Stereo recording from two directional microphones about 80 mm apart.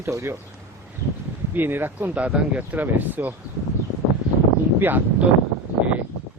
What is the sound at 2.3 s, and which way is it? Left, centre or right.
Speech, centre.